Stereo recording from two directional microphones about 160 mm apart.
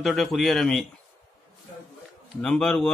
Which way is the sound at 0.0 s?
Centre (ahead or behind).